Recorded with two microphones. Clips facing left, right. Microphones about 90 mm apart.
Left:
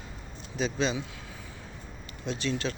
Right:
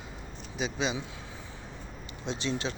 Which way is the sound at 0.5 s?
15° right (ahead or behind).